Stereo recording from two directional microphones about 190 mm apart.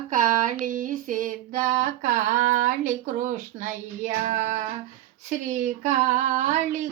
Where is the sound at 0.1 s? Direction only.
40° right (ahead or behind).